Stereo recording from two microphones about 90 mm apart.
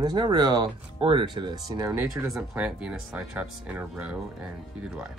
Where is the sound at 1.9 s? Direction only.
20° right (ahead or behind).